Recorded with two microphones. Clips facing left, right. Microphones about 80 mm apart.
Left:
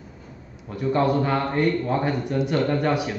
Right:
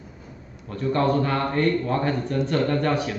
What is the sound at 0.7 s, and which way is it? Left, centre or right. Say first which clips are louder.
A man's voice: left 1 dB; centre.